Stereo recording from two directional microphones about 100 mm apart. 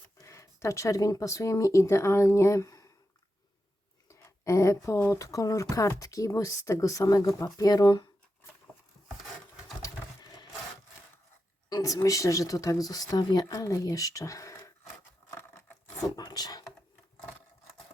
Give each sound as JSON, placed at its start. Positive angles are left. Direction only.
{"t": 0.2, "sound": "speech", "side_deg": 30}
{"t": 4.1, "sound": "speech", "side_deg": 30}
{"t": 9.8, "sound": "pigeon", "side_deg": 40}
{"t": 11.7, "sound": "speech", "side_deg": 35}
{"t": 16.1, "sound": "a sound", "side_deg": 40}